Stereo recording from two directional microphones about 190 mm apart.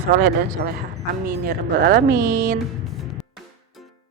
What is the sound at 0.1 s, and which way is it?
Speech, 50° right (ahead or behind).